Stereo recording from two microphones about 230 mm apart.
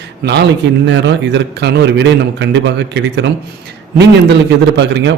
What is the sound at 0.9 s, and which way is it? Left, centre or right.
A man's voice, right.